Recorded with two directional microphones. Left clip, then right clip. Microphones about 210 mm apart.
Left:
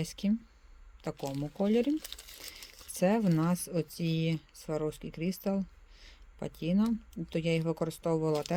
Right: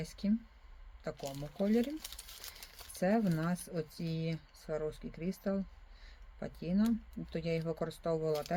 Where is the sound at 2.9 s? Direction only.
40° left (ahead or behind).